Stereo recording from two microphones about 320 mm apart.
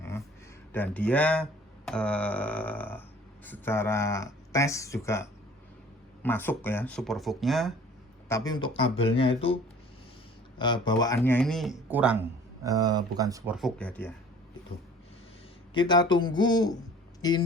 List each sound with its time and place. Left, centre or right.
0.7 s speech: centre
8.3 s speech: centre
10.6 s speech: centre
13.6 s speech: centre
15.7 s speech: centre